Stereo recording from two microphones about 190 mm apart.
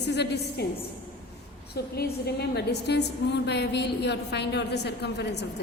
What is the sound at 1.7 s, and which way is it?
A woman's voice, 60° left (ahead or behind).